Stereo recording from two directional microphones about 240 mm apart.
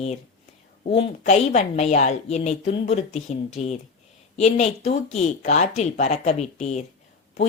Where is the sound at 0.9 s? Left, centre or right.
Left.